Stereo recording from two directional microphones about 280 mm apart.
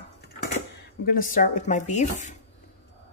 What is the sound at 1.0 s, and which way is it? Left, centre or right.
Speech, left.